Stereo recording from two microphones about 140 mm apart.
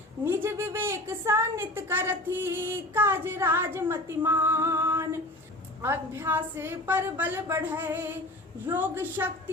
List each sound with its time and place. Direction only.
0.3 s speech: 15° right (ahead or behind)